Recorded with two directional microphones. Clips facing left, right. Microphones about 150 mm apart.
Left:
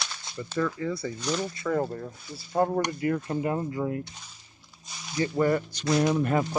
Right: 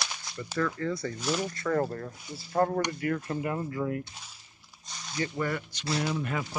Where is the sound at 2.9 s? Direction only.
25° left (ahead or behind).